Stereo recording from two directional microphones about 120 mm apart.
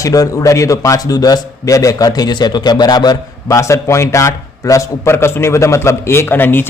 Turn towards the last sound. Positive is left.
turn(degrees=15)  # may be behind; listen again after turning